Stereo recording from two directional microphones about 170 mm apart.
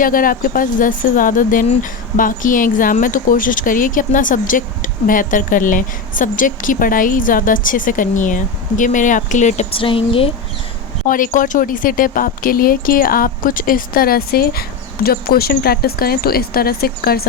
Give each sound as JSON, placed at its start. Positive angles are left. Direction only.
{"t": 0.0, "sound": "speech", "side_deg": 55}
{"t": 9.7, "sound": "a woman's voice", "side_deg": 30}
{"t": 11.0, "sound": "speech", "side_deg": 50}